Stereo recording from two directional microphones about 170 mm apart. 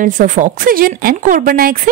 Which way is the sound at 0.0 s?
50° right (ahead or behind).